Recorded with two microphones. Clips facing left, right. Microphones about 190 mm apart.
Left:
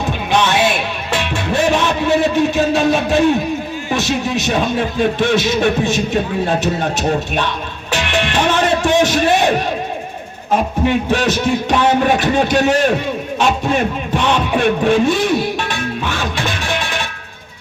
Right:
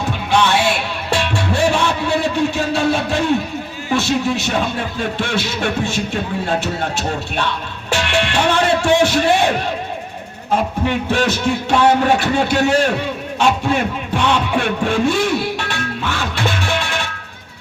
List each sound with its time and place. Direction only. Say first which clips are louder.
0.3 s music: left 1 dB; 20° left (ahead or behind)
3.9 s speech: right 1 dB; 15° left (ahead or behind)
6.6 s music: left 4 dB; 15° left (ahead or behind)
10.5 s speech: left 3 dB; 15° left (ahead or behind)
13.4 s a sound: even; 15° left (ahead or behind)